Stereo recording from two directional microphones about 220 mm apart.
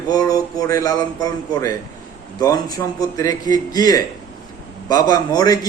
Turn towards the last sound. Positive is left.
turn(degrees=15)  # may be behind; listen again after turning